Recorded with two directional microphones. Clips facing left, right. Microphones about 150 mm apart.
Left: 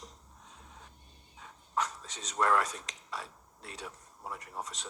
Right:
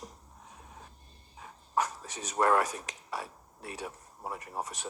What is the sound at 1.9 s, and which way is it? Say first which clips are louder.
Speech: right 3 dB; 30° right (ahead or behind).